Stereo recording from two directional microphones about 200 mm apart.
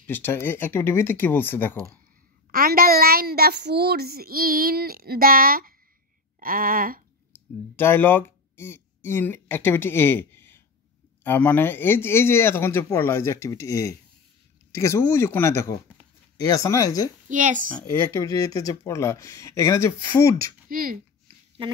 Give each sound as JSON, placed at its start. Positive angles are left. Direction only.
{"t": 0.0, "sound": "speech", "side_deg": 10}
{"t": 2.5, "sound": "speech", "side_deg": -45}
{"t": 7.3, "sound": "clicking", "side_deg": 10}
{"t": 7.7, "sound": "speech", "side_deg": 10}
{"t": 17.3, "sound": "speech", "side_deg": -40}
{"t": 17.7, "sound": "speech", "side_deg": 20}
{"t": 20.6, "sound": "speech", "side_deg": -45}